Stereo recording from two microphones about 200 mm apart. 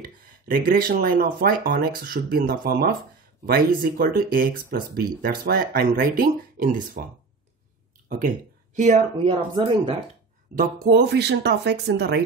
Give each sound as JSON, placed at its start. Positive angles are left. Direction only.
{"t": 0.0, "sound": "speech", "side_deg": -45}
{"t": 8.7, "sound": "speech", "side_deg": -35}
{"t": 10.6, "sound": "speech", "side_deg": -50}